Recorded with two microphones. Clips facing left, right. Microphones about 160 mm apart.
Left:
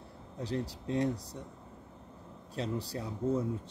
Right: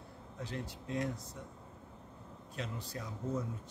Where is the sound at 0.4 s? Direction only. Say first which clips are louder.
Left 7 dB; 35° left (ahead or behind).